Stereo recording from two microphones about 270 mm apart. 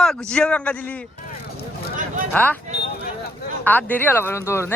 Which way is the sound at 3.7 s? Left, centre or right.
Centre.